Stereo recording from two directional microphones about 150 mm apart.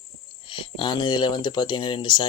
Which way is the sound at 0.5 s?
35° left (ahead or behind).